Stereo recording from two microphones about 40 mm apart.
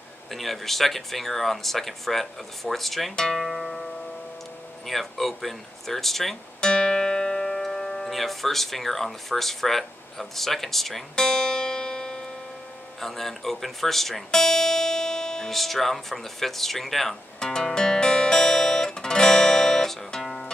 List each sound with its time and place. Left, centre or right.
0.3 s speech: centre
3.3 s music: centre
4.8 s speech: centre
6.6 s speech: centre
11.1 s music: centre
13.0 s speech: centre
15.5 s speech: centre
17.4 s music: centre